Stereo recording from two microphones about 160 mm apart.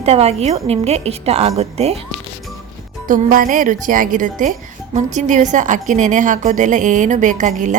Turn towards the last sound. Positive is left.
turn(degrees=-50)  # may be behind; listen again after turning